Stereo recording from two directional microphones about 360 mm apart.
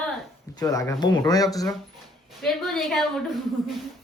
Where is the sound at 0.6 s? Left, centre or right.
Centre.